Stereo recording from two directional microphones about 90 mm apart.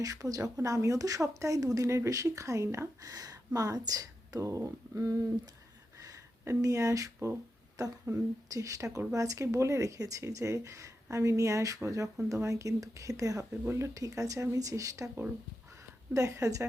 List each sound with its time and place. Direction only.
0.0 s speech: 40° right (ahead or behind)
16.1 s speech: 40° right (ahead or behind)